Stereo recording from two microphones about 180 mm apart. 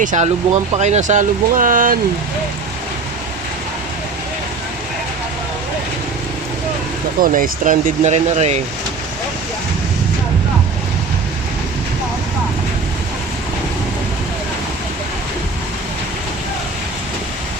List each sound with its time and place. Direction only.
0.0 s speech: 40° right (ahead or behind)
7.2 s speech: 50° right (ahead or behind)